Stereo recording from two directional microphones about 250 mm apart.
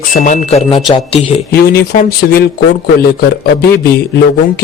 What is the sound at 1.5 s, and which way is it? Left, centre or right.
Speech, left.